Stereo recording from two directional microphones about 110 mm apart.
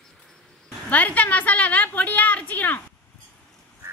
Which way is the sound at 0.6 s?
15° left (ahead or behind).